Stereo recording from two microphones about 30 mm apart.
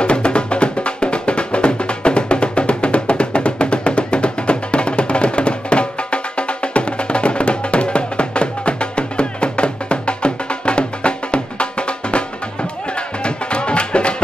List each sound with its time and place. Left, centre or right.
0.0 s music: left
13.2 s music: left